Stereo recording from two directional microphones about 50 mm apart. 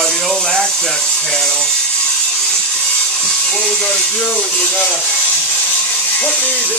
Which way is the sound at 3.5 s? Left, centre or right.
Left.